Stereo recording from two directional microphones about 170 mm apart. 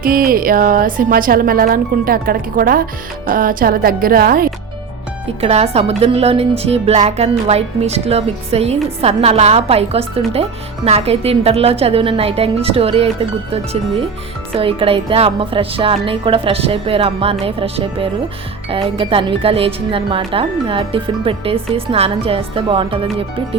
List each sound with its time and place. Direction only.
0.0 s speech: 60° right (ahead or behind)
5.4 s speech: 35° right (ahead or behind)
14.5 s speech: 30° right (ahead or behind)